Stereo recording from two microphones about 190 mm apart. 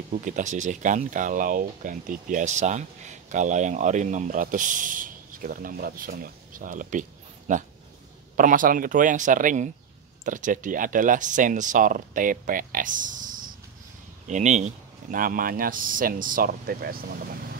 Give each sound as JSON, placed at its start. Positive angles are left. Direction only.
{"t": 0.2, "sound": "speech", "side_deg": -40}